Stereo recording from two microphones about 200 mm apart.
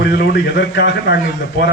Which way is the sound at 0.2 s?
60° left (ahead or behind).